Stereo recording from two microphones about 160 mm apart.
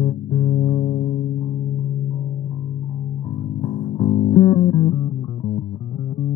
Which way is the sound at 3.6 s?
35° left (ahead or behind).